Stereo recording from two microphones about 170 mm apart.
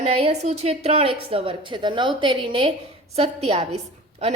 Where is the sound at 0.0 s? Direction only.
40° right (ahead or behind).